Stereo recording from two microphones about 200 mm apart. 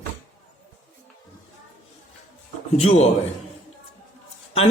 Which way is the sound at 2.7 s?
30° left (ahead or behind).